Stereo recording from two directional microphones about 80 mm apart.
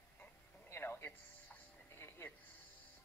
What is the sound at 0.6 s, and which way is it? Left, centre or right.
Music, left.